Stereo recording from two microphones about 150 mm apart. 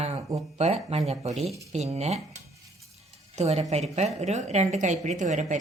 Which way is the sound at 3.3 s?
45° right (ahead or behind).